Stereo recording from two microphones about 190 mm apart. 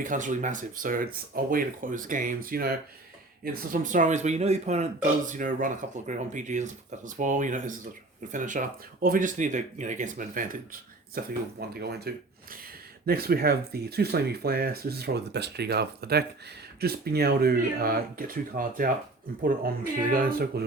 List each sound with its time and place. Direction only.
0.0 s speech: 45° right (ahead or behind)